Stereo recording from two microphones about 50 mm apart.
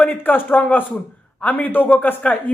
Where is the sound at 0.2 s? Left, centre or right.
Left.